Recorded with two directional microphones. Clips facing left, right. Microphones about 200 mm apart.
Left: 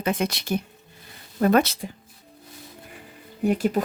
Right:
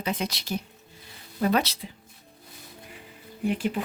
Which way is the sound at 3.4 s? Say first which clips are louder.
Left 5 dB; 45° left (ahead or behind).